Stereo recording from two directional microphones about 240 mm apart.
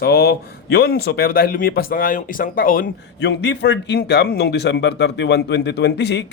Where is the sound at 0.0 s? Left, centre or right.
Left.